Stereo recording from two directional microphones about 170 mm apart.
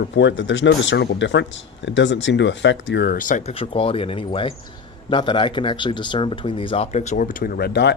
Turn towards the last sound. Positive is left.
turn(degrees=75)  # may be behind; listen again after turning